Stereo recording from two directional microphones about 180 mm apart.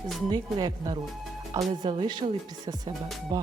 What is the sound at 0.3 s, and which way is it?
Speech, 20° right (ahead or behind).